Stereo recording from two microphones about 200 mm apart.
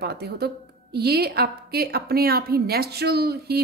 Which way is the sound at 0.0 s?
55° right (ahead or behind).